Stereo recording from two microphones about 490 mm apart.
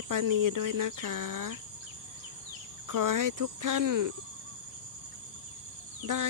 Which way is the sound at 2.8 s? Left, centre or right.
Right.